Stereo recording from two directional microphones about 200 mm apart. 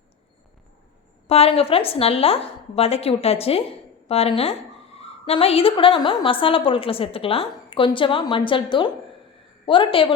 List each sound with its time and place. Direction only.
1.3 s a woman's voice: 30° left (ahead or behind)